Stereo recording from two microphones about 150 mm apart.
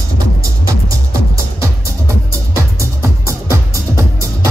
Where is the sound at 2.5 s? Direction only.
20° right (ahead or behind).